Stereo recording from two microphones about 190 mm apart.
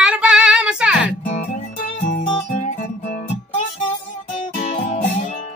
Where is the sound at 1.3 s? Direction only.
45° left (ahead or behind).